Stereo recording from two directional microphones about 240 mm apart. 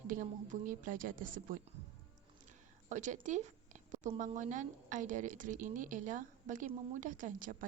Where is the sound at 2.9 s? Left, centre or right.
Right.